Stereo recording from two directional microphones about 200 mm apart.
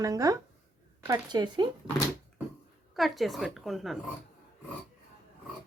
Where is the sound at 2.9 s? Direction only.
Centre (ahead or behind).